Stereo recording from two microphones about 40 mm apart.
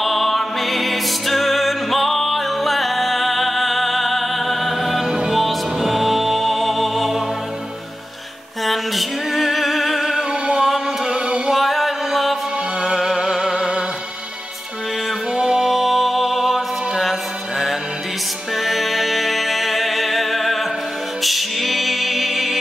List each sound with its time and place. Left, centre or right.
0.0 s music: centre
8.6 s music: centre
10.4 s a sound: right
10.7 s music: centre
11.5 s music: centre
15.3 s music: centre